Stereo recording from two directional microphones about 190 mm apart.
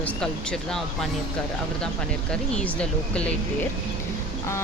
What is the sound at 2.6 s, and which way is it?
Speech, 5° left (ahead or behind).